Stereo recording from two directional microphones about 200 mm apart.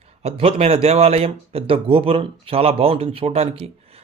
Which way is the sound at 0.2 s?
30° right (ahead or behind).